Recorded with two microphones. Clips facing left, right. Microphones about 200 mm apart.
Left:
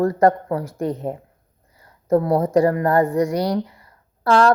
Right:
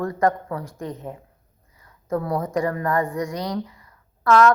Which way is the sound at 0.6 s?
75° left (ahead or behind).